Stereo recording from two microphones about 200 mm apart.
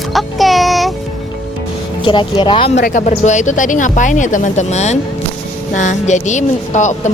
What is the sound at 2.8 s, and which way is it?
Speech, 45° left (ahead or behind).